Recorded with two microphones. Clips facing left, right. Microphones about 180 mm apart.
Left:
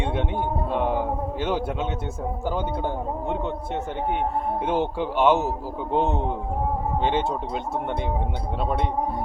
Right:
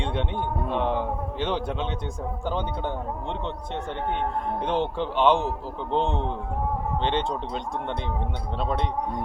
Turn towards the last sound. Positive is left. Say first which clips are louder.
# left 2 dB
turn(degrees=5)  # may be behind; listen again after turning